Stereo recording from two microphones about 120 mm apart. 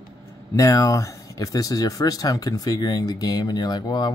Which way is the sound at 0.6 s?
30° left (ahead or behind).